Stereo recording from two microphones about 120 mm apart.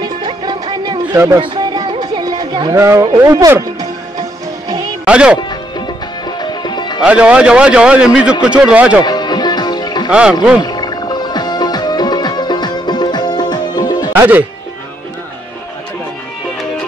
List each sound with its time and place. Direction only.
0.0 s music: 40° right (ahead or behind)
1.1 s speech: 25° right (ahead or behind)
1.4 s a sound: 40° right (ahead or behind)
2.7 s music: 25° right (ahead or behind)
5.0 s speech: 10° right (ahead or behind)
6.2 s music: 35° left (ahead or behind)
7.0 s a man's voice: 10° right (ahead or behind)
9.0 s music: 35° left (ahead or behind)
14.1 s speech: 20° right (ahead or behind)